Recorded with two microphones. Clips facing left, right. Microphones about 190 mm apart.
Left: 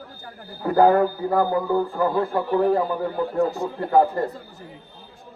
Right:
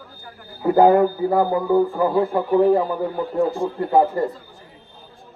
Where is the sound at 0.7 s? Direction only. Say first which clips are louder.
Right 3 dB; 15° right (ahead or behind).